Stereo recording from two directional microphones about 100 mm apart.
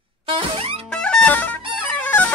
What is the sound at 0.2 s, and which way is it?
Music, 65° right (ahead or behind).